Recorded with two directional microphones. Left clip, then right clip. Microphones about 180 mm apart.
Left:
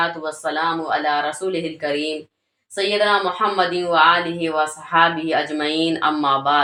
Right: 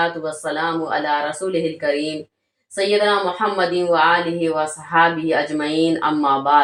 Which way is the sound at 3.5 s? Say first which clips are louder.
Right 1 dB; 20° right (ahead or behind).